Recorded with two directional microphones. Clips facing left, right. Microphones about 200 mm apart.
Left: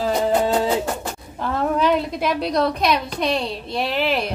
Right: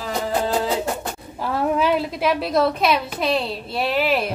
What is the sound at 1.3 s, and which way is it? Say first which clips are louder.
A woman's voice: even; 5° right (ahead or behind).